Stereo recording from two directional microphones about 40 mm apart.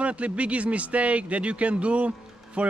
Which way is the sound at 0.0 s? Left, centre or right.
Right.